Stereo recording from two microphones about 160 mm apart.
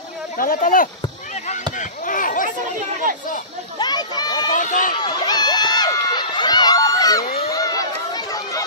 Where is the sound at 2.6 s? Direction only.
50° right (ahead or behind).